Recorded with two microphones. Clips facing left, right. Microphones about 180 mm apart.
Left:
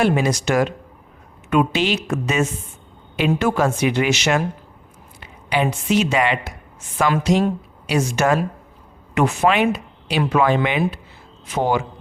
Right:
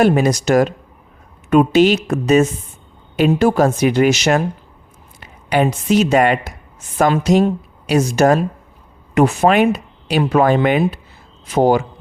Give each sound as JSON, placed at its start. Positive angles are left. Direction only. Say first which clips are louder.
{"t": 0.0, "sound": "a woman's voice", "louder": "right 4 dB", "side_deg": -40}